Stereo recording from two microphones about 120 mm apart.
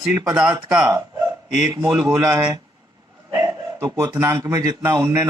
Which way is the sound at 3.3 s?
25° right (ahead or behind).